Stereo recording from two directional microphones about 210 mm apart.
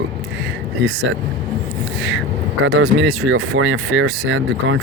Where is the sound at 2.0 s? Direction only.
65° right (ahead or behind).